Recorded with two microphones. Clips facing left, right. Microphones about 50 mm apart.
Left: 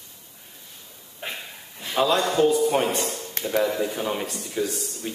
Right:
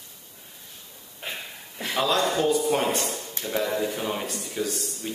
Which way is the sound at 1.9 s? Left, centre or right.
Centre.